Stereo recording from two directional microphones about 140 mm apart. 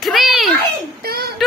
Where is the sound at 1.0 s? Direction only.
90° right.